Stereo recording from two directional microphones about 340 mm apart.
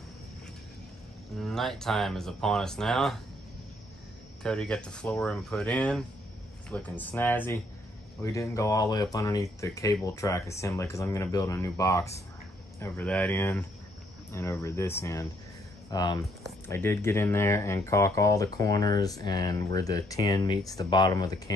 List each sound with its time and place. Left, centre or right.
1.3 s speech: centre
4.4 s speech: centre